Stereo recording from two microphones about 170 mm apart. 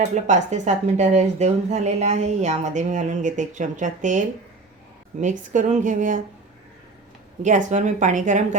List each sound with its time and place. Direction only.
0.1 s a woman's voice: 45° right (ahead or behind)
5.2 s a woman's voice: 50° right (ahead or behind)
7.4 s a woman's voice: 45° right (ahead or behind)